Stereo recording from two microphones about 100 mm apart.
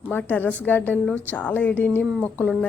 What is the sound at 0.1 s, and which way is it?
A woman's voice, 15° left (ahead or behind).